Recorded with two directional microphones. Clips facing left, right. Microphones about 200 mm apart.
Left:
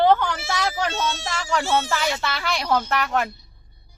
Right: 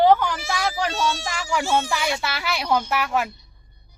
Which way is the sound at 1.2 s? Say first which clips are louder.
Even; 10° right (ahead or behind).